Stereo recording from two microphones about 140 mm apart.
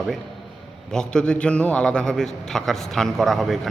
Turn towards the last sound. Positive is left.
turn(degrees=0)  # may be behind; listen again after turning